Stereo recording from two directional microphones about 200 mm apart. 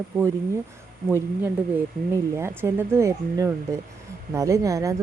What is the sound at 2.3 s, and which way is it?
Speech, 10° right (ahead or behind).